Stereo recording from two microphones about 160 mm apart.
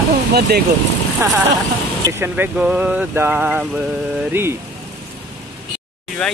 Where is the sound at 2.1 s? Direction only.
15° right (ahead or behind).